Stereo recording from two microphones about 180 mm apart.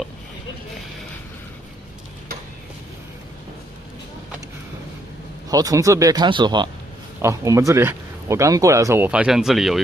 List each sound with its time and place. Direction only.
5.5 s speech: 20° right (ahead or behind); by 9.8 s centre (ahead or behind)